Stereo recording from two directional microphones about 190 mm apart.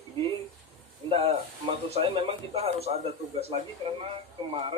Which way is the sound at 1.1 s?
30° right (ahead or behind).